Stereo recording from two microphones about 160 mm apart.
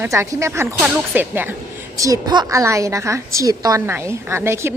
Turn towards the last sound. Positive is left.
turn(degrees=-15)  # may be behind; listen again after turning